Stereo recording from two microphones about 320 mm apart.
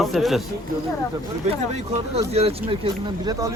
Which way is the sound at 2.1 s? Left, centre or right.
Centre.